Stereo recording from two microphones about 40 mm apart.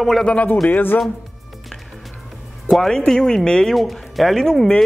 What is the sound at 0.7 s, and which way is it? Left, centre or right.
Speech, left.